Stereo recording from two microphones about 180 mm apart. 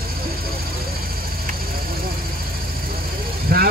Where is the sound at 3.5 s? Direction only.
55° right (ahead or behind).